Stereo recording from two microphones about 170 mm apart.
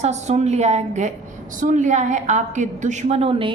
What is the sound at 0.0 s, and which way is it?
A woman's voice, 40° right (ahead or behind).